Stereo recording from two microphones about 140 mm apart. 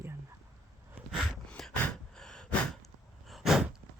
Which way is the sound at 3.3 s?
Centre (ahead or behind).